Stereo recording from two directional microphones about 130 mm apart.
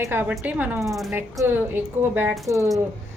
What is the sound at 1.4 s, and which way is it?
Speech, 15° right (ahead or behind).